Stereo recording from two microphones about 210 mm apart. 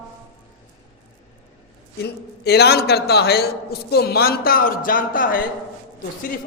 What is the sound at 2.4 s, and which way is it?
A man's voice, 50° left (ahead or behind).